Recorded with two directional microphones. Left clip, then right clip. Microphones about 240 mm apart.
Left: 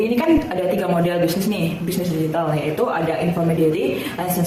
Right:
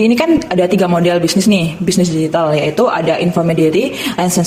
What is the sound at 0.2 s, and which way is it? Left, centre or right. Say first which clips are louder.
A man's voice: right 6 dB; right.